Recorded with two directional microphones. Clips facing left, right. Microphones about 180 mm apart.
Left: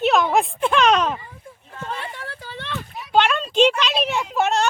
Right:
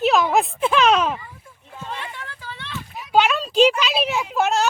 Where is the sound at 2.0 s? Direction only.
35° left (ahead or behind).